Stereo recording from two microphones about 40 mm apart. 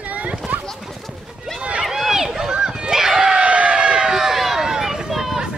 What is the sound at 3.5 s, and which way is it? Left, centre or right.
Run, right.